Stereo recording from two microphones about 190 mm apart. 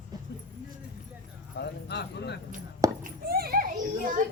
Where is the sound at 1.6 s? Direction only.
60° left (ahead or behind).